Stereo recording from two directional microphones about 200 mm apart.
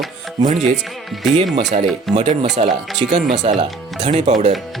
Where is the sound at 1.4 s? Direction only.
35° right (ahead or behind).